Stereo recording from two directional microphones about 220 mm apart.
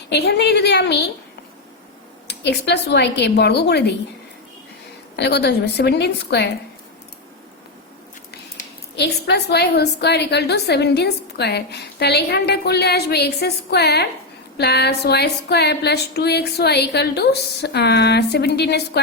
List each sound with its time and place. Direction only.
0.1 s a woman's voice: 50° left (ahead or behind)
2.2 s a woman's voice: 50° left (ahead or behind)
5.1 s a woman's voice: 50° left (ahead or behind)
8.3 s a woman's voice: 45° left (ahead or behind)